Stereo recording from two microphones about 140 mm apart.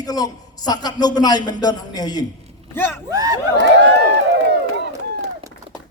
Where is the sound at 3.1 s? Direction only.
25° right (ahead or behind).